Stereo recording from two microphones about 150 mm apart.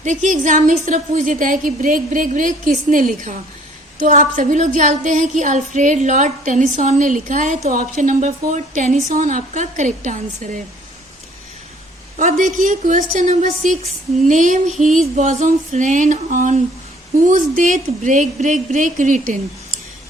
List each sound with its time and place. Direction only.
0.0 s a woman's voice: 55° right (ahead or behind)
12.1 s a woman's voice: 55° right (ahead or behind)